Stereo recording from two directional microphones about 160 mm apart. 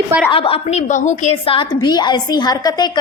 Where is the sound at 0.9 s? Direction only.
50° left (ahead or behind).